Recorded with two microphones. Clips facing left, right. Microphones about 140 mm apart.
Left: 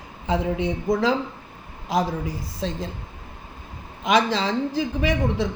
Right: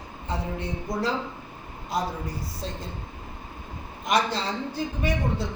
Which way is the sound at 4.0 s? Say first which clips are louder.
Left 5 dB; 90° left.